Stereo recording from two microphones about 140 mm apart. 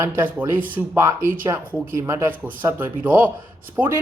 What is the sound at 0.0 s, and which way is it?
A man's voice, 15° right (ahead or behind).